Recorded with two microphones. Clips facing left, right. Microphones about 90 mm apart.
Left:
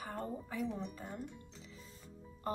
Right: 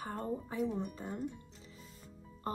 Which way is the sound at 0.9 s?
25° right (ahead or behind).